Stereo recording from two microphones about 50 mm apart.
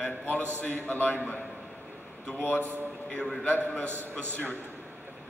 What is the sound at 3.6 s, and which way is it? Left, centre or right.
Speech, left.